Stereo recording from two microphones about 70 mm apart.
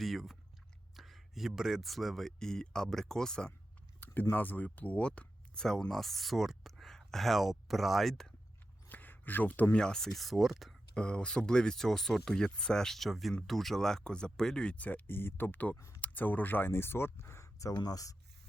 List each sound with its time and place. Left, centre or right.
0.0 s speech: centre
4.0 s speech: left
5.9 s speech: centre
8.9 s a sound: left
9.7 s speech: centre
10.9 s speech: centre; by 17.7 s left
17.7 s speech: left